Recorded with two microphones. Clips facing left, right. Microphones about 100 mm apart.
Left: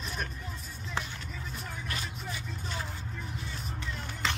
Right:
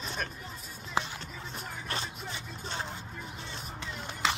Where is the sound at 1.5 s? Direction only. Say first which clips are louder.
Right 3 dB; 30° right (ahead or behind).